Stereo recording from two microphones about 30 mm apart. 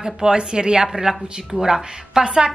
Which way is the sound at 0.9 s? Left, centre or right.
Centre.